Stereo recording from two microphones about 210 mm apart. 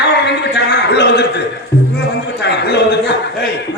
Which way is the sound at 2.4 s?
55° left (ahead or behind).